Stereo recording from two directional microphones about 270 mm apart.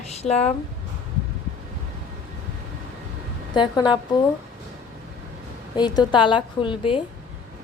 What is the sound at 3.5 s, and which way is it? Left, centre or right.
Speech, centre.